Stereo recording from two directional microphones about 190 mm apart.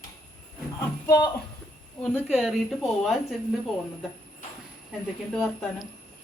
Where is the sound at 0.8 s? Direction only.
15° left (ahead or behind).